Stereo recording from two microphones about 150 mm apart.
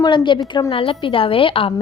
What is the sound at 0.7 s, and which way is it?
Speech, 35° left (ahead or behind).